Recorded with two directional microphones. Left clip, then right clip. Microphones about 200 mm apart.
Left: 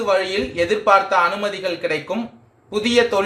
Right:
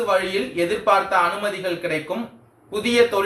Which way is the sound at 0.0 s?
55° left (ahead or behind).